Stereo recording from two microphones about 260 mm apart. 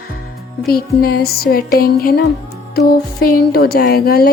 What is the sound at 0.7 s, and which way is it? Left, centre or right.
Music, left.